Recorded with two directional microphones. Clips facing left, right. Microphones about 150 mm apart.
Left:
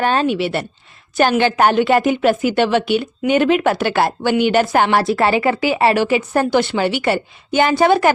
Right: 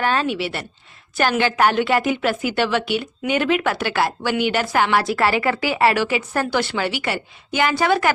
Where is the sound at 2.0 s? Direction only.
35° left (ahead or behind).